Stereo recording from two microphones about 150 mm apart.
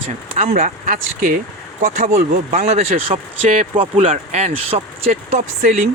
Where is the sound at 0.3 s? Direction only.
50° right (ahead or behind); by 2.2 s 70° right (ahead or behind).